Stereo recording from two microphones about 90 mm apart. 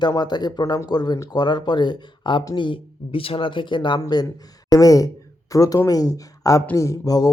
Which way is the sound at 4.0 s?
50° left (ahead or behind).